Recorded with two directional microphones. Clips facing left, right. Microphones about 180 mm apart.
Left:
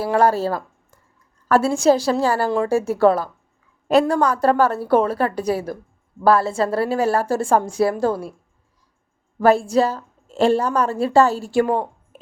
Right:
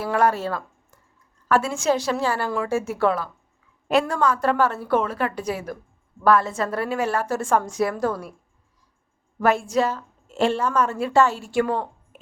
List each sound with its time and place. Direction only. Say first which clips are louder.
0.0 s a woman's voice: left 4 dB; 30° left (ahead or behind)
9.4 s a woman's voice: left 5 dB; 30° left (ahead or behind)
12.1 s a sound: left 4 dB; 35° left (ahead or behind)